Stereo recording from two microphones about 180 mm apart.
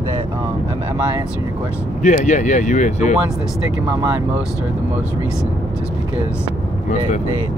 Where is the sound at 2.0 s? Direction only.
40° left (ahead or behind).